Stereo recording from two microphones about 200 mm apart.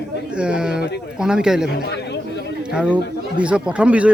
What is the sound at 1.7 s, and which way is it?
Chatter, 55° left (ahead or behind).